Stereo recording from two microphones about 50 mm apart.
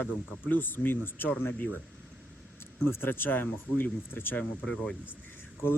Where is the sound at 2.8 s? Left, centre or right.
Left.